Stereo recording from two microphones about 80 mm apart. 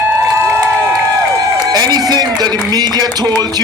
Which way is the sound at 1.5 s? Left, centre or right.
Right.